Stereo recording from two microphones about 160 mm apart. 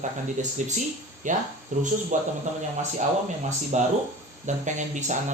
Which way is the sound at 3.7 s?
45° right (ahead or behind).